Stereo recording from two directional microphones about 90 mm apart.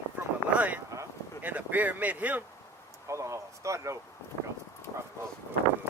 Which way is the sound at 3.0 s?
35° right (ahead or behind).